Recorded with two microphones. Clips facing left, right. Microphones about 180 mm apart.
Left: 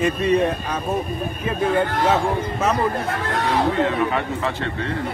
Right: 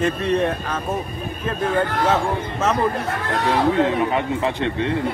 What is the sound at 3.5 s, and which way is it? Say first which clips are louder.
Speech: right 2 dB; 20° right (ahead or behind).